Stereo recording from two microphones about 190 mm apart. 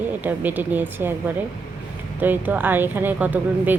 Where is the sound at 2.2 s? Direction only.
10° right (ahead or behind).